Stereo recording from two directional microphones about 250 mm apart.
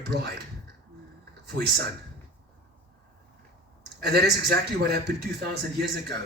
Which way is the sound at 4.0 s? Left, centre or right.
Right.